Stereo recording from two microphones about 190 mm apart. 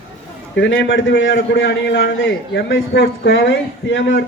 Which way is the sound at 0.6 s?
70° left (ahead or behind).